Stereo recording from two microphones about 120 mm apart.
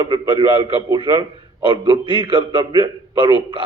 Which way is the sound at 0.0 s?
45° right (ahead or behind).